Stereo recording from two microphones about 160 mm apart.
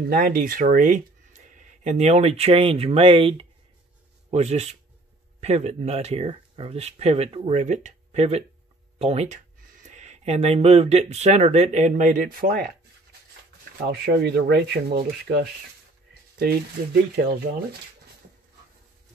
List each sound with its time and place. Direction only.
0.1 s speech: 60° right (ahead or behind); by 9.4 s 40° right (ahead or behind)
9.7 s speech: 50° right (ahead or behind)
13.8 s speech: 90° right
16.3 s speech: 80° right